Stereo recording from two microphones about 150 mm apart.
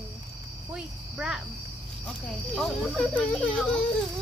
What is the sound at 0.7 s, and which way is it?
Speech, 5° right (ahead or behind).